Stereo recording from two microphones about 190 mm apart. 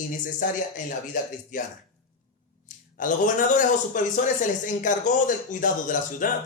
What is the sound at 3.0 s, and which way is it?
Speech, 45° left (ahead or behind).